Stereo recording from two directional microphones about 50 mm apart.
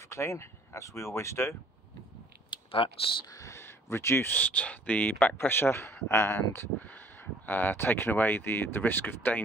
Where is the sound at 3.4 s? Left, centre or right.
Left.